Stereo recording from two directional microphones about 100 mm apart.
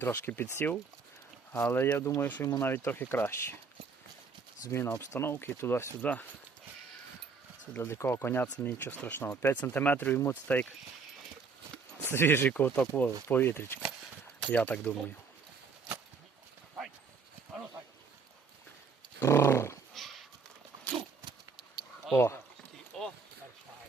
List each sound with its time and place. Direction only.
0.0 s speech: 20° left (ahead or behind)
4.6 s speech: 25° left (ahead or behind)
6.0 s speech: 15° left (ahead or behind)
7.7 s speech: 25° left (ahead or behind)
12.0 s speech: 25° left (ahead or behind)
19.2 s dog: 30° left (ahead or behind)
19.9 s a sound: centre (ahead or behind)
22.9 s a sound: 5° left (ahead or behind)